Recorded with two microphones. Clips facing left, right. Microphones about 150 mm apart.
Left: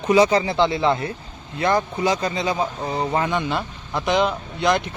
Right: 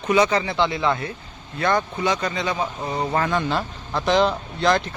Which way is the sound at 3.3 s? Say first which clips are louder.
Right 1 dB; 5° left (ahead or behind).